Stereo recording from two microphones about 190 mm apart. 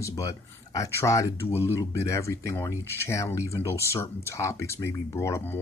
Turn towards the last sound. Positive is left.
turn(degrees=10)  # may be behind; listen again after turning